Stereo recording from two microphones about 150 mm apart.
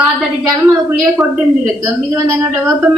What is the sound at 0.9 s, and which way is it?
Speech, 10° right (ahead or behind).